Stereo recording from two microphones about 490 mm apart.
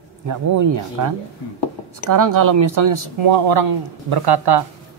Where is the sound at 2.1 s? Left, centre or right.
Right.